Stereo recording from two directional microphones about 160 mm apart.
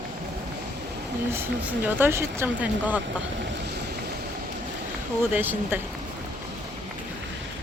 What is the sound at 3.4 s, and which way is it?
Speech, 90° right.